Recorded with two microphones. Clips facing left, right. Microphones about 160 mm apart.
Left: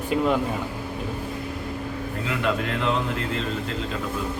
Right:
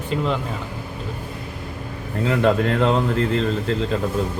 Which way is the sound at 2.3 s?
40° right (ahead or behind).